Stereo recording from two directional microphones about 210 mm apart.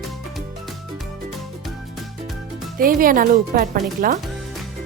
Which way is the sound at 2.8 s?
40° right (ahead or behind).